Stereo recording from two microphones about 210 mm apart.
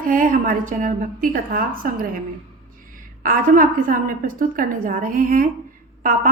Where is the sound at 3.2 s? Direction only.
40° right (ahead or behind).